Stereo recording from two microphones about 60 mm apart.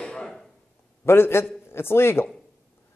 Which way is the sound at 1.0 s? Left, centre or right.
Left.